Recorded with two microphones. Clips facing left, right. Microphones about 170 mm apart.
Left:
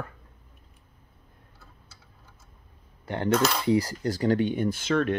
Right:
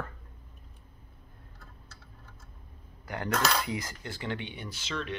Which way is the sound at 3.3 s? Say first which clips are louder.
Left 5 dB; centre (ahead or behind).